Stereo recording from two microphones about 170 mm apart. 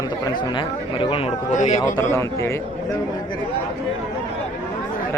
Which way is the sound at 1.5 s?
45° left (ahead or behind).